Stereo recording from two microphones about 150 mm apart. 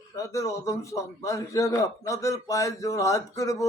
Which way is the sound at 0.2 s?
20° left (ahead or behind).